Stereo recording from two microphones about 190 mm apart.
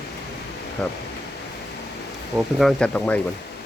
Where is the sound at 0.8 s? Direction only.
5° left (ahead or behind).